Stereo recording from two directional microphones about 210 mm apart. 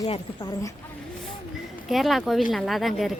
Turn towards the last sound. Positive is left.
turn(degrees=0)  # may be behind; listen again after turning